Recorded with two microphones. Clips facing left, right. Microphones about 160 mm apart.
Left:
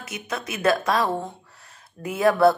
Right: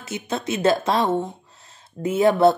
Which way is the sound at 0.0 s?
25° right (ahead or behind).